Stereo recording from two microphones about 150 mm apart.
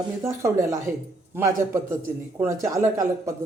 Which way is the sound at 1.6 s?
15° right (ahead or behind).